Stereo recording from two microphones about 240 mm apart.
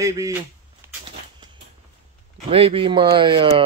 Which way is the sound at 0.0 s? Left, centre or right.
Centre.